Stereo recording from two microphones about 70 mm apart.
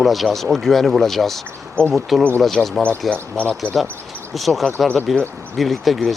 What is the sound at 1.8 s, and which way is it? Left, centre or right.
Speech, centre.